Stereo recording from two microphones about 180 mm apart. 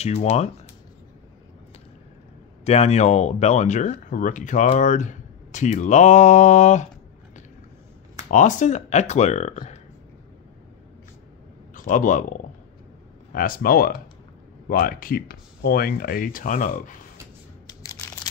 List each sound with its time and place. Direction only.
0.0 s speech: 35° left (ahead or behind)
2.6 s speech: 35° left (ahead or behind)
8.3 s speech: 45° left (ahead or behind)
11.7 s a man's voice: 45° left (ahead or behind)
17.6 s crunch: 20° left (ahead or behind)